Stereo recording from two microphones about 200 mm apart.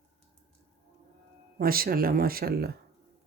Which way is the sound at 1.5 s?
45° right (ahead or behind).